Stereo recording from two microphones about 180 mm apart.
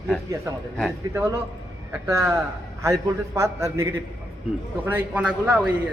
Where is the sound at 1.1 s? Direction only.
15° right (ahead or behind).